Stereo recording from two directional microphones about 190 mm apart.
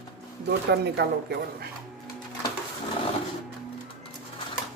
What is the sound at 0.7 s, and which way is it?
Speech, 60° right (ahead or behind).